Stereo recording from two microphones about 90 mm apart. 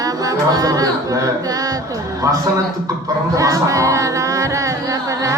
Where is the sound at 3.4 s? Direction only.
40° right (ahead or behind).